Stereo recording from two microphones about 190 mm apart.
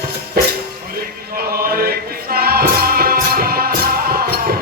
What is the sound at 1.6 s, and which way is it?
Music, 50° right (ahead or behind).